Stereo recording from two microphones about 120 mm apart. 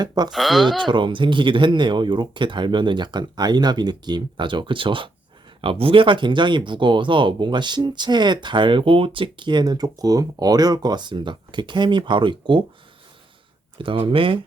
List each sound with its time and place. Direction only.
0.0 s speech: 35° right (ahead or behind)
0.3 s speech: centre (ahead or behind)
0.8 s speech: 40° right (ahead or behind)
13.7 s speech: 45° right (ahead or behind)